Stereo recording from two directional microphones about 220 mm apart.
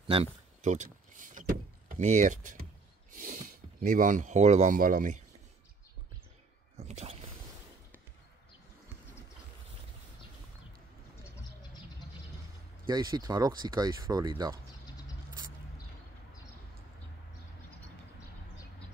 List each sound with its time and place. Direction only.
0.1 s a sound: 30° right (ahead or behind)
1.9 s speech: 30° right (ahead or behind)
3.8 s speech: 35° right (ahead or behind)
6.8 s speech: 30° right (ahead or behind)
12.8 s speech: 20° right (ahead or behind)